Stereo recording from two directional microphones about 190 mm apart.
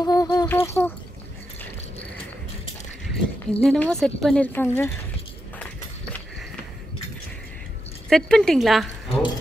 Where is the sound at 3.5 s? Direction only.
5° left (ahead or behind).